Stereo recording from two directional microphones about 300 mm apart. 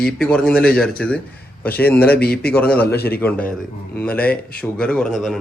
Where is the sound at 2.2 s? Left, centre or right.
Left.